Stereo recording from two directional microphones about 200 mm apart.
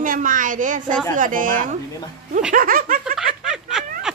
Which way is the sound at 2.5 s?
45° right (ahead or behind).